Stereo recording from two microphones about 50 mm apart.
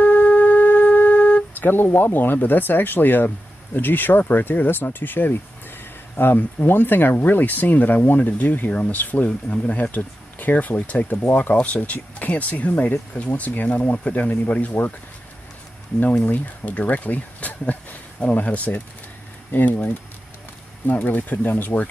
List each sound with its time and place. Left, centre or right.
0.0 s wind instrument: left
3.7 s speech: left
8.6 s speech: left
16.3 s speech: left